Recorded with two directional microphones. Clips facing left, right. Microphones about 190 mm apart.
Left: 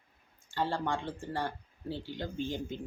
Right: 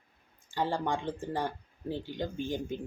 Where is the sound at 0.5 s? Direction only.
15° right (ahead or behind).